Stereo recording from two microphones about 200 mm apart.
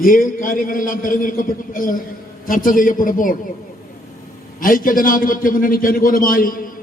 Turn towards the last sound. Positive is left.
turn(degrees=45)  # may be behind; listen again after turning